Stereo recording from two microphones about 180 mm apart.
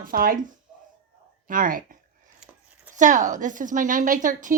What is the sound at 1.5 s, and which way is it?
A woman's voice, 50° right (ahead or behind).